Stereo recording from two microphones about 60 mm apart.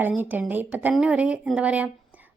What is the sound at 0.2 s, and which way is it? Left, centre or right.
Speech, right.